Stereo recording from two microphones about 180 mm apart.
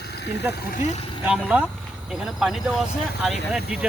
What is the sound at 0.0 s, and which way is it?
Vehicle, 65° left (ahead or behind).